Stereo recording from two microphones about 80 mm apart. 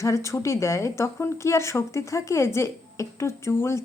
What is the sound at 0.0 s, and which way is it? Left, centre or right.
Speech, left.